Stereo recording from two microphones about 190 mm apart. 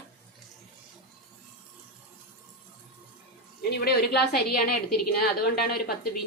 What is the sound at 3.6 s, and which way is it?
A woman's voice, 55° left (ahead or behind).